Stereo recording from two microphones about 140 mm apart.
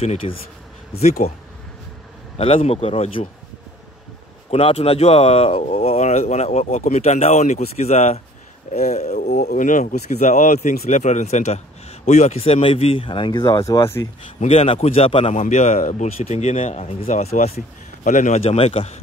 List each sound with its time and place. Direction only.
0.0 s speech: 45° left (ahead or behind)
2.3 s speech: 45° left (ahead or behind)
4.5 s speech: 45° left (ahead or behind); by 14.0 s 20° left (ahead or behind)
14.4 s speech: 45° left (ahead or behind)
15.4 s speech: 55° left (ahead or behind)
17.3 s a man's voice: 60° left (ahead or behind)
18.4 s speech: 45° left (ahead or behind)